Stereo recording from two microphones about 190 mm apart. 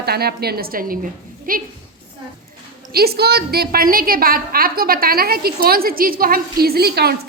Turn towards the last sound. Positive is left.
turn(degrees=-60)  # may be behind; listen again after turning